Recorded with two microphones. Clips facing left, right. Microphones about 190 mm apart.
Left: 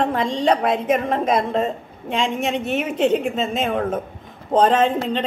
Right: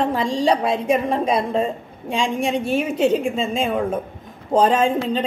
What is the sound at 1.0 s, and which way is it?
Speech, 10° right (ahead or behind).